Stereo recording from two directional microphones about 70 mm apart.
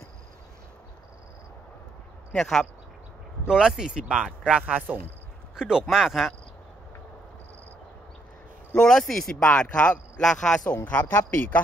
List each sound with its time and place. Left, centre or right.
2.3 s speech: centre
3.4 s speech: centre
5.6 s speech: centre
8.7 s speech: centre
10.7 s speech: left